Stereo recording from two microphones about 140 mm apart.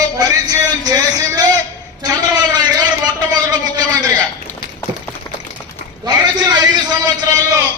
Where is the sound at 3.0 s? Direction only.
30° right (ahead or behind).